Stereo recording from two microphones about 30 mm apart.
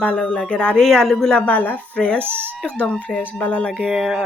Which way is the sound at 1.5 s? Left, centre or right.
Left.